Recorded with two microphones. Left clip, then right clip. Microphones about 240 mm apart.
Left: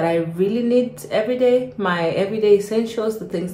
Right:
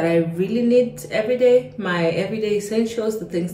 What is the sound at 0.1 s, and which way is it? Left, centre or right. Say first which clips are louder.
Speech: even; centre.